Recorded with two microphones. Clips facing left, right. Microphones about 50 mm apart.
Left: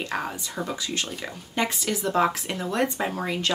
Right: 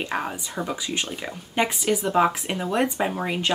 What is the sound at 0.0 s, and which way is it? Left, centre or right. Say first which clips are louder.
Speech: right 2 dB; centre.